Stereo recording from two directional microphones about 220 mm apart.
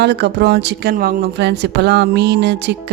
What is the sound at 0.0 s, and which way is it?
Speech, 50° right (ahead or behind).